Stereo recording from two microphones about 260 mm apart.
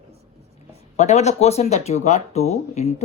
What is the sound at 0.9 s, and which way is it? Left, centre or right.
Speech, left.